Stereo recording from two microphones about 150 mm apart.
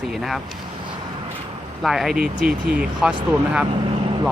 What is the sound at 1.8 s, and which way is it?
Speech, centre (ahead or behind).